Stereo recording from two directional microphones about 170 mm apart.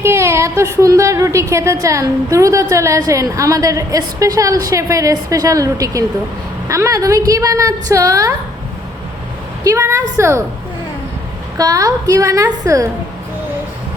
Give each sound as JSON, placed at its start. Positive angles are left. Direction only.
{"t": 0.0, "sound": "a woman's voice", "side_deg": -15}
{"t": 9.6, "sound": "a woman's voice", "side_deg": -15}
{"t": 11.5, "sound": "a woman's voice", "side_deg": -20}